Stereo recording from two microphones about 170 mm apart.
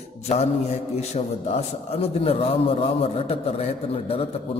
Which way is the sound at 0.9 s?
40° left (ahead or behind).